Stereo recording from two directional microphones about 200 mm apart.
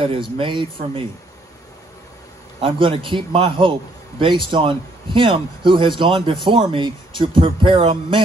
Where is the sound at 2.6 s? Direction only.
25° right (ahead or behind).